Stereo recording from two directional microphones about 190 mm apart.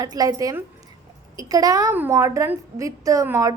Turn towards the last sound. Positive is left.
turn(degrees=-15)  # may be behind; listen again after turning